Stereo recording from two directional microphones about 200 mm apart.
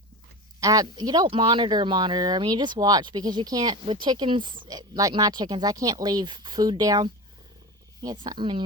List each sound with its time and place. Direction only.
0.6 s speech: 20° right (ahead or behind)